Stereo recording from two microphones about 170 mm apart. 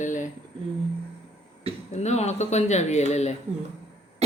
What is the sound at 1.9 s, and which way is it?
Speech, 40° left (ahead or behind).